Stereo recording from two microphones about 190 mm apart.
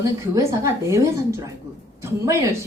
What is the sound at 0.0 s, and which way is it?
A woman's voice, 15° right (ahead or behind).